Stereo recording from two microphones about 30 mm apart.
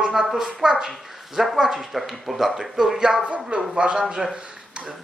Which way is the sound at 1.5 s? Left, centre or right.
Centre.